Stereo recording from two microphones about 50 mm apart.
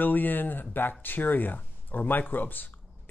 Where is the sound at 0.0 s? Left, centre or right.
Left.